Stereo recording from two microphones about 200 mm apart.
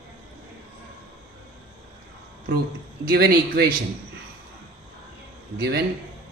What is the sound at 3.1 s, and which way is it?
Speech, 50° right (ahead or behind).